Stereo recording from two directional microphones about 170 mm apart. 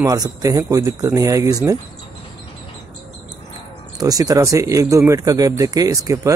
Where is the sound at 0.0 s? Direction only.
20° right (ahead or behind).